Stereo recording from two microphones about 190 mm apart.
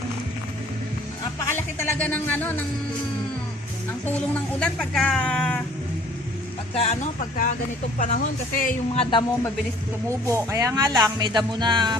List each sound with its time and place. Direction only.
1.5 s music: 10° left (ahead or behind)
4.0 s speech: 5° left (ahead or behind)
6.7 s speech: 35° left (ahead or behind)
9.0 s speech: 25° left (ahead or behind)
10.1 s speech: 15° right (ahead or behind)